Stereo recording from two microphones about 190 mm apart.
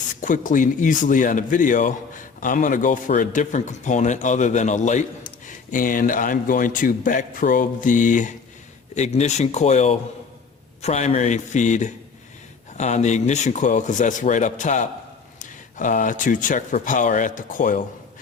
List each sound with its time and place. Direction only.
0.2 s a man's voice: 45° left (ahead or behind)